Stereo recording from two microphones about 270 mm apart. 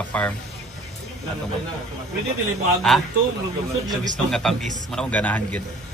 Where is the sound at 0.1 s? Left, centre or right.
Centre.